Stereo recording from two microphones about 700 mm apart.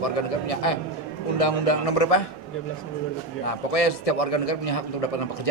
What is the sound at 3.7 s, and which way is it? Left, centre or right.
A man's voice, left.